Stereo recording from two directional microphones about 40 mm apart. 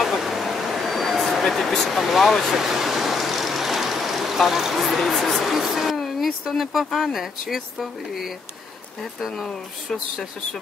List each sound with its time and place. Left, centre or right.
0.0 s vehicle: centre
5.4 s a sound: centre
6.2 s speech: centre